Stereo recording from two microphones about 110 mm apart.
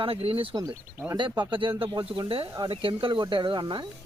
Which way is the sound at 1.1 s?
45° right (ahead or behind).